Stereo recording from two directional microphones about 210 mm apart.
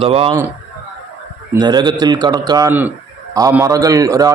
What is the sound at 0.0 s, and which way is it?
Speech, 25° right (ahead or behind).